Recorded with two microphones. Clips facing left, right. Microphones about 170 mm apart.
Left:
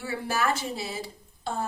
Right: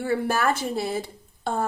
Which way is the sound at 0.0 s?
55° right (ahead or behind).